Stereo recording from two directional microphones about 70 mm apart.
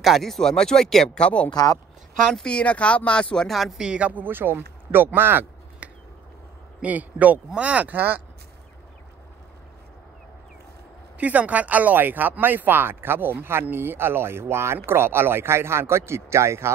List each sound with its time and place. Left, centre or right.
0.0 s speech: centre
1.5 s speech: left
2.4 s speech: centre
3.5 s speech: centre
3.8 s speech: centre; by 5.5 s right
5.8 s finger snapping: right
6.8 s speech: right
11.1 s speech: right